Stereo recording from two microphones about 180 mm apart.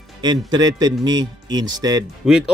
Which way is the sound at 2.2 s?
5° right (ahead or behind).